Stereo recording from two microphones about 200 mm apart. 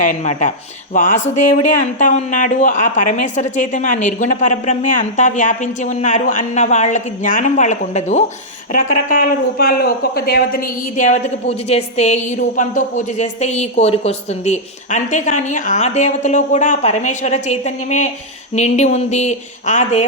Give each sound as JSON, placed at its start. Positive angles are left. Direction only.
{"t": 0.0, "sound": "speech", "side_deg": 40}